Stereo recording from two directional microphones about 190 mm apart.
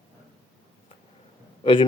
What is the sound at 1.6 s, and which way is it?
Speech, 25° left (ahead or behind).